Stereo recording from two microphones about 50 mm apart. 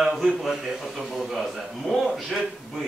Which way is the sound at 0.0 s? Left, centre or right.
Centre.